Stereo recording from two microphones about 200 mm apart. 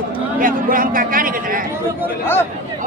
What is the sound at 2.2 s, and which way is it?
Speech, 10° left (ahead or behind).